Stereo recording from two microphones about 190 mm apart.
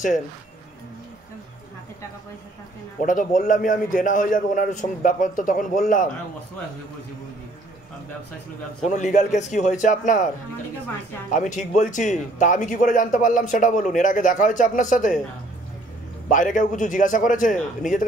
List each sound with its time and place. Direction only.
3.0 s a man's voice: 45° left (ahead or behind)
8.8 s a man's voice: 40° left (ahead or behind)
11.2 s a man's voice: 45° left (ahead or behind)
16.3 s a man's voice: 40° left (ahead or behind)